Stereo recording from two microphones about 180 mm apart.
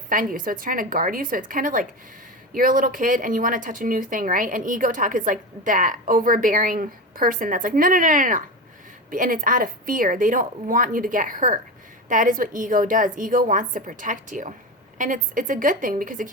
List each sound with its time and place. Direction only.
0.1 s speech: 50° right (ahead or behind)